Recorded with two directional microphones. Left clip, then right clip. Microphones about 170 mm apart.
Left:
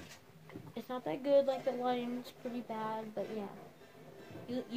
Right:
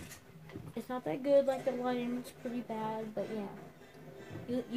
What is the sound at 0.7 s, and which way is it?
A woman's voice, 20° right (ahead or behind).